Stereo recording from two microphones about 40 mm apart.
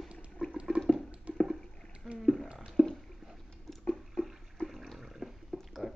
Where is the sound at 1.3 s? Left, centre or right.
Right.